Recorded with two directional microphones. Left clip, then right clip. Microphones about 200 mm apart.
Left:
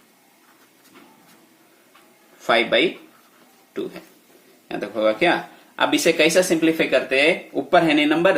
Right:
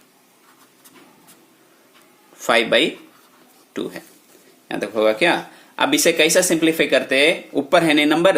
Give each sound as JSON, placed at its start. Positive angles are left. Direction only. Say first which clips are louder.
{"t": 2.4, "sound": "speech", "louder": "right 2 dB", "side_deg": -35}
{"t": 4.7, "sound": "speech", "louder": "right 3 dB", "side_deg": -30}